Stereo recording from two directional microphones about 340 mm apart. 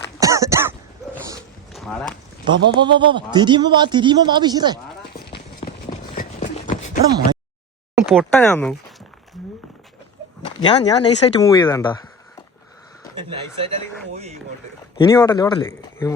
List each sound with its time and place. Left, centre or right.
0.2 s throat clearing: centre
1.3 s a sound: centre
2.5 s a man's voice: centre
5.6 s a sound: left
8.1 s speech: centre
10.4 s speech: centre
13.7 s speech: centre
14.9 s speech: centre